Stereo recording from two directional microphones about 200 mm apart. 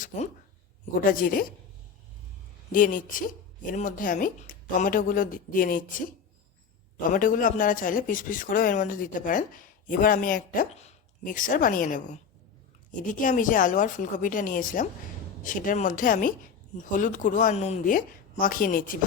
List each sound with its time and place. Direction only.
1.0 s speech: 45° left (ahead or behind)
2.7 s speech: 40° left (ahead or behind)
7.1 s speech: 40° left (ahead or behind)
13.1 s a woman's voice: 40° left (ahead or behind)